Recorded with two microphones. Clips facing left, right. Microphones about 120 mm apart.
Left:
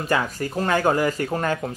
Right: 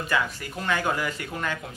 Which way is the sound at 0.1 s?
40° left (ahead or behind).